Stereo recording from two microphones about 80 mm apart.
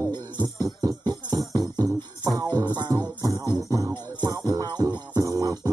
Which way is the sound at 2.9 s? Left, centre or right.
Right.